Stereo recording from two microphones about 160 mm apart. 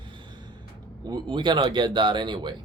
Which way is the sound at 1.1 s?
30° right (ahead or behind).